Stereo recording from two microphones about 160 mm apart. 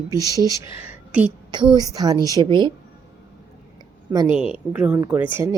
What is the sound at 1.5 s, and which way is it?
A woman's voice, 25° right (ahead or behind).